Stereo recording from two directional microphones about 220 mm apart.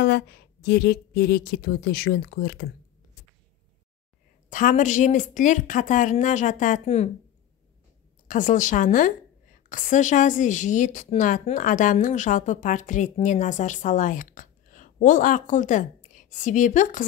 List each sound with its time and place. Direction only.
0.0 s speech: 45° left (ahead or behind)
4.5 s a woman's voice: 35° left (ahead or behind)
8.3 s a woman's voice: 35° left (ahead or behind)